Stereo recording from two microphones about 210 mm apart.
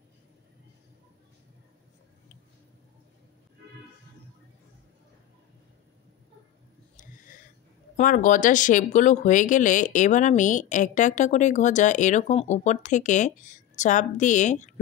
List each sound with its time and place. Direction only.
7.9 s speech: 40° left (ahead or behind)